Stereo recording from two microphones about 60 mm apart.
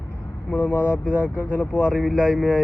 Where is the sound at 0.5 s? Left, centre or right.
Left.